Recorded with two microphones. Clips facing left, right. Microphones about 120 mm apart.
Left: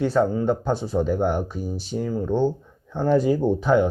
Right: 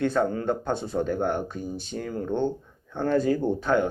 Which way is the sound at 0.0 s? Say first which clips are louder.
Left 4 dB; 5° left (ahead or behind).